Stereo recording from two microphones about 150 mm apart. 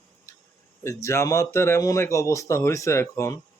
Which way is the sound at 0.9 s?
20° left (ahead or behind).